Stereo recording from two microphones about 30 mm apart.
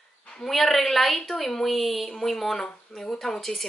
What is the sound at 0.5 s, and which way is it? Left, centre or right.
A woman's voice, centre.